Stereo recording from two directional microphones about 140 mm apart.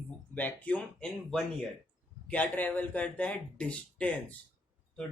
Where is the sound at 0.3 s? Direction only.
10° left (ahead or behind).